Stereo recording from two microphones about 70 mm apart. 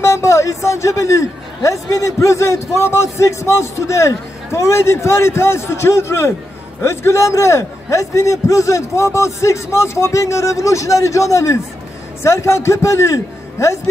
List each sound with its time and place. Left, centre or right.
0.0 s a man's voice: left